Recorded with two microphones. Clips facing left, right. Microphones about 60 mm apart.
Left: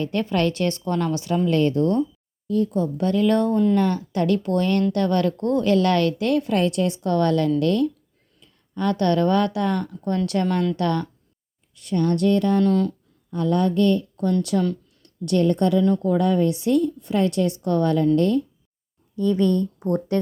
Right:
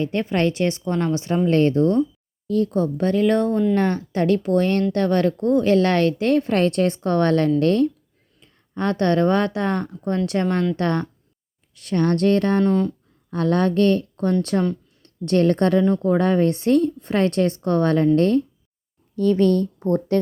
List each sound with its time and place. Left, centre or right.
0.0 s a woman's voice: right
2.6 s speech: right
3.0 s a woman's voice: right
5.4 s a woman's voice: centre
5.6 s speech: right
6.5 s a woman's voice: right
11.7 s speech: right
12.6 s a woman's voice: centre
13.3 s speech: right
15.0 s a sound: right
15.4 s speech: right
15.8 s speech: right